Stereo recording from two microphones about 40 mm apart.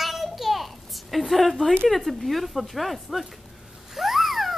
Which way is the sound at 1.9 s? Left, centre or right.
Centre.